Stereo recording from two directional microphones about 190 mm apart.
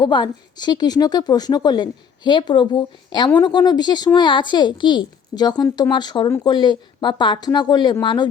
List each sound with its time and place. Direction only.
0.0 s speech: 25° left (ahead or behind)